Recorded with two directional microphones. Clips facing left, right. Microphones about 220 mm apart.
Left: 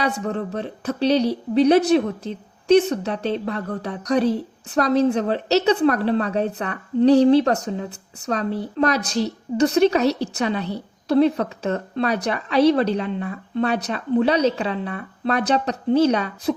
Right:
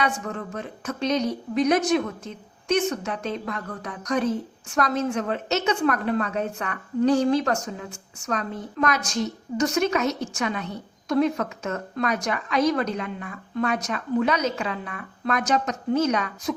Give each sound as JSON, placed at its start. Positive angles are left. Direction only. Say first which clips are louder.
{"t": 0.0, "sound": "speech", "louder": "left 4 dB", "side_deg": 35}